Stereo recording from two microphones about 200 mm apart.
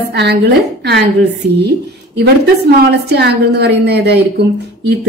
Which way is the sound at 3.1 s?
55° right (ahead or behind).